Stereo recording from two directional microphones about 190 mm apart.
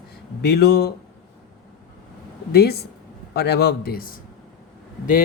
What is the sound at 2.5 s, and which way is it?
Speech, 55° left (ahead or behind).